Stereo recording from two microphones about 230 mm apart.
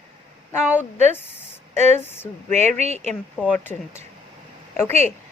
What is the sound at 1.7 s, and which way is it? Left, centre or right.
Speech, right.